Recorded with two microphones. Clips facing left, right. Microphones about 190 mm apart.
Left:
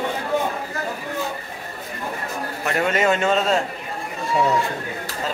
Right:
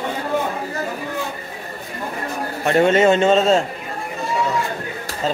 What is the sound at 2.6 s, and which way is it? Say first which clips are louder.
A man's voice: right 7 dB; 30° right (ahead or behind).